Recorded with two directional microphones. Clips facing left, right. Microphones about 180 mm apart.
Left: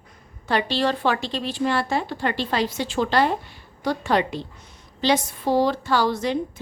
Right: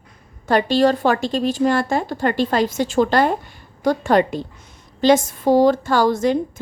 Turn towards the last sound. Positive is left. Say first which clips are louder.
# right 5 dB
turn(degrees=-45)  # may be behind; listen again after turning